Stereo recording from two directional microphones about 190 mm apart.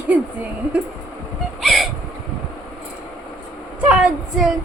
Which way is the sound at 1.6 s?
Centre (ahead or behind).